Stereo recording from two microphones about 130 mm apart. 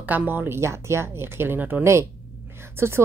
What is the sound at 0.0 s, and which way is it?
Speech, 15° right (ahead or behind).